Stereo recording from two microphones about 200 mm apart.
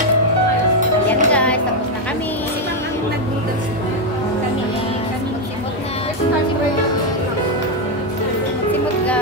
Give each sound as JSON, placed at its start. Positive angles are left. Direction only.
{"t": 1.0, "sound": "music", "side_deg": 5}